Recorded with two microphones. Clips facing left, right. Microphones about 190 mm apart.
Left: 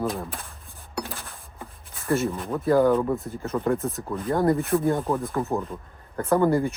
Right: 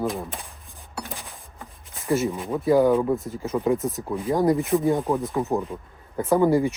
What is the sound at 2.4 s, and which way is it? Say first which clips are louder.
Speech: right 2 dB; centre (ahead or behind).